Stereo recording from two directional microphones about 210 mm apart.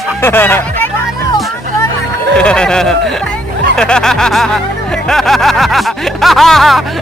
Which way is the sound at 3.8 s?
5° left (ahead or behind).